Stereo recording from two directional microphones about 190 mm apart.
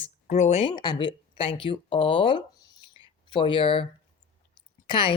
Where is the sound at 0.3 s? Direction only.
35° left (ahead or behind).